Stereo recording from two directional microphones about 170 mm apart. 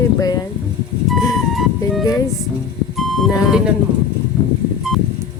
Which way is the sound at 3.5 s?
5° right (ahead or behind).